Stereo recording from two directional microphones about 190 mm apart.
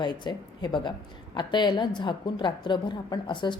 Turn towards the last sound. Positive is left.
turn(degrees=25)  # may be behind; listen again after turning